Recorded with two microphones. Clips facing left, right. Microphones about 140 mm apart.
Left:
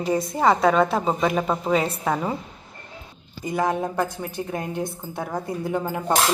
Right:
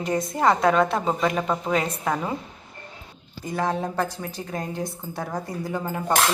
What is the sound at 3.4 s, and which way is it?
A woman's voice, 10° left (ahead or behind).